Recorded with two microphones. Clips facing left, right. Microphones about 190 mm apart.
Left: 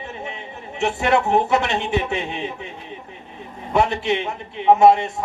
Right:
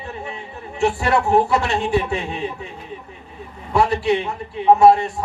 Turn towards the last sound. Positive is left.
turn(degrees=20)  # may be behind; listen again after turning